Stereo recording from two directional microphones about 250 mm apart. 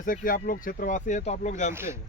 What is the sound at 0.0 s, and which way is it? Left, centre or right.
Speech, left.